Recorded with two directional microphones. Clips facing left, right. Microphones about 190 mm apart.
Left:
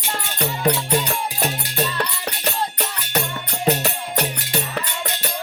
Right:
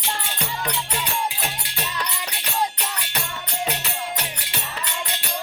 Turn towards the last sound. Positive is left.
turn(degrees=45)  # may be behind; listen again after turning